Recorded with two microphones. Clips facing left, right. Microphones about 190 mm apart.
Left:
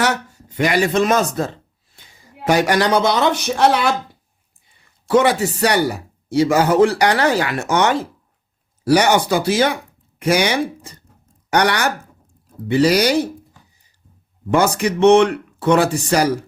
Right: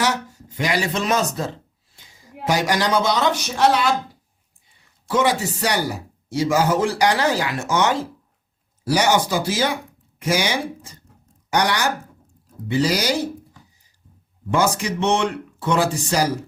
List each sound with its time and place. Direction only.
0.0 s speech: 60° left (ahead or behind)
2.5 s speech: 60° left (ahead or behind)
5.0 s speech: 60° left (ahead or behind)
14.5 s speech: 60° left (ahead or behind)